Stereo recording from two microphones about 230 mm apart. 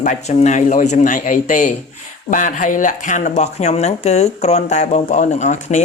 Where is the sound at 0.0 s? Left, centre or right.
Left.